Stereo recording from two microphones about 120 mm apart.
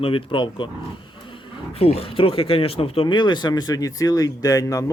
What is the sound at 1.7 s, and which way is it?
Speech, 55° left (ahead or behind).